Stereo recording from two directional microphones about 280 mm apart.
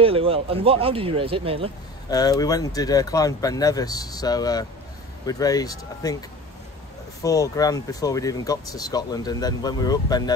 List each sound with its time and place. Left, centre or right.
0.0 s speech: centre
2.0 s speech: centre
7.2 s speech: centre